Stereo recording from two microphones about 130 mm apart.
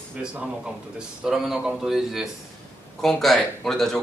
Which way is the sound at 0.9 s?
5° right (ahead or behind).